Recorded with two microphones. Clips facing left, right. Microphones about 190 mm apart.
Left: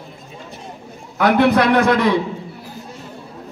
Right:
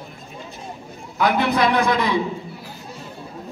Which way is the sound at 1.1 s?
65° left (ahead or behind).